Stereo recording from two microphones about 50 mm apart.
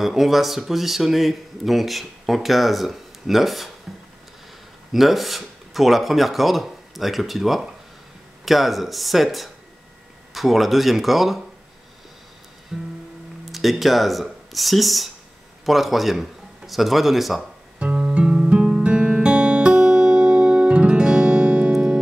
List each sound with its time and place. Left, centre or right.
0.0 s speech: centre
4.9 s speech: centre
12.7 s music: centre
13.5 s speech: centre
17.4 s guitar: right